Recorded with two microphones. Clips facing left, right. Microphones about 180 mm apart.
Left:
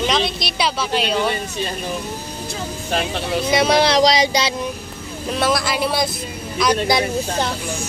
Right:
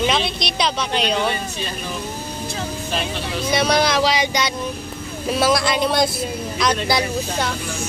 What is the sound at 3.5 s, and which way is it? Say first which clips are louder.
Speech: left 2 dB; 25° left (ahead or behind).